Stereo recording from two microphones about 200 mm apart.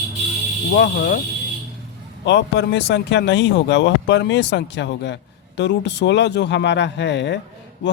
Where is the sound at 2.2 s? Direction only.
60° left (ahead or behind).